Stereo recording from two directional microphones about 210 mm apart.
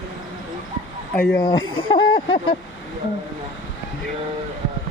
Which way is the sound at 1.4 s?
20° left (ahead or behind).